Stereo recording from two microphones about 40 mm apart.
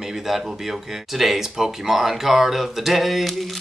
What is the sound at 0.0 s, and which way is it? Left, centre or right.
Speech, centre.